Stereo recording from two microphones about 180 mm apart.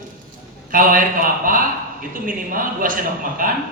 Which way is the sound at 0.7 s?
50° right (ahead or behind).